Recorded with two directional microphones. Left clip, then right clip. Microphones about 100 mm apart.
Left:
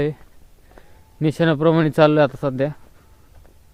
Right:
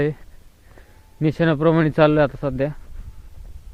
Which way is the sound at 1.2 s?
25° left (ahead or behind).